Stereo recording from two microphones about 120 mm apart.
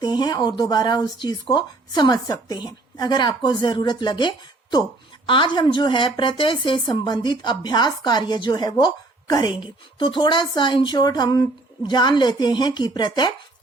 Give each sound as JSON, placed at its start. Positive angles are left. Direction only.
{"t": 0.0, "sound": "speech", "side_deg": 40}